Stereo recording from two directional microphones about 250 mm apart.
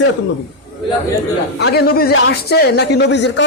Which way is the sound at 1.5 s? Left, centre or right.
Left.